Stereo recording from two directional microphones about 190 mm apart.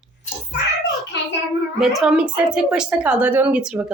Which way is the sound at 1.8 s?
Centre (ahead or behind).